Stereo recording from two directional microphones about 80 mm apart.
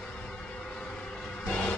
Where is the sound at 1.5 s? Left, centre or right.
Centre.